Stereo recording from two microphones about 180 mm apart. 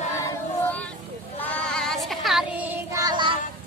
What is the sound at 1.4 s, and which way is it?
Child singing, 5° left (ahead or behind).